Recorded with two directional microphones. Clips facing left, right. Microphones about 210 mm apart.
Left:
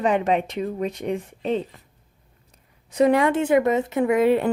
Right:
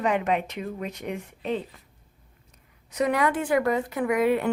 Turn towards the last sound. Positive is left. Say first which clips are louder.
# left 4 dB
turn(degrees=30)  # may be behind; listen again after turning